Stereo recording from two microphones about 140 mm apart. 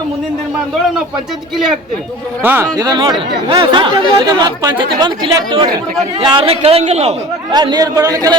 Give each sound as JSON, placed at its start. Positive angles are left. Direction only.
{"t": 2.4, "sound": "speech", "side_deg": -15}
{"t": 2.7, "sound": "speech", "side_deg": -30}
{"t": 7.5, "sound": "a man's voice", "side_deg": -30}